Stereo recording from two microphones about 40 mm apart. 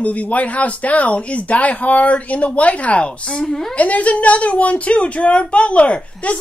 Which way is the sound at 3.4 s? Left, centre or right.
Centre.